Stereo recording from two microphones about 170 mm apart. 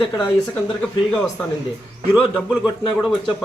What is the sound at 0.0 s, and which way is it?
A man's voice, 15° left (ahead or behind).